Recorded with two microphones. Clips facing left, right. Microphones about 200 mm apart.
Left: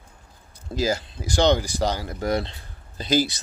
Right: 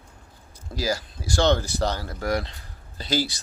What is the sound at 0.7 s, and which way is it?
Speech, 20° left (ahead or behind).